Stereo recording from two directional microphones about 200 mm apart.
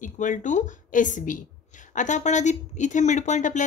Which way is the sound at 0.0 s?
40° left (ahead or behind).